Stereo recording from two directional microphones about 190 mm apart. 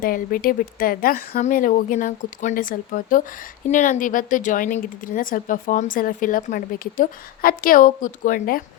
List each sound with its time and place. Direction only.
0.0 s speech: 50° left (ahead or behind)